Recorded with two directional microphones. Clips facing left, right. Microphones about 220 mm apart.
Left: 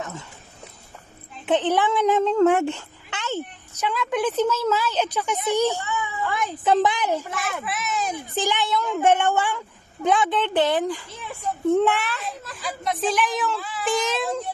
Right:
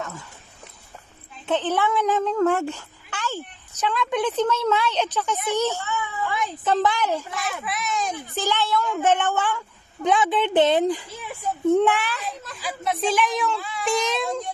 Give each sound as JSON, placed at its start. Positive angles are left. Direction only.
{"t": 0.0, "sound": "dog", "side_deg": 20}
{"t": 1.5, "sound": "speech", "side_deg": 15}
{"t": 3.8, "sound": "a woman's voice", "side_deg": 10}
{"t": 7.1, "sound": "a woman's voice", "side_deg": 5}
{"t": 10.0, "sound": "speech", "side_deg": 0}
{"t": 10.5, "sound": "speech", "side_deg": -20}
{"t": 11.2, "sound": "speech", "side_deg": -5}